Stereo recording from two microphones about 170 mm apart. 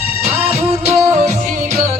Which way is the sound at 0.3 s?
35° right (ahead or behind).